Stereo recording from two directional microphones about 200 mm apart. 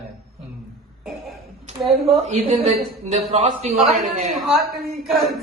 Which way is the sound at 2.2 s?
35° right (ahead or behind).